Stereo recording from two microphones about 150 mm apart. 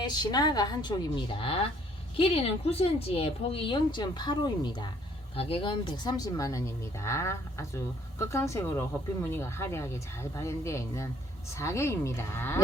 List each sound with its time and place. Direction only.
0.0 s a woman's voice: 30° left (ahead or behind)